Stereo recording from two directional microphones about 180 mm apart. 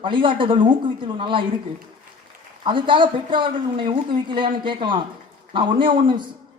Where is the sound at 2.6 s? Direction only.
25° right (ahead or behind).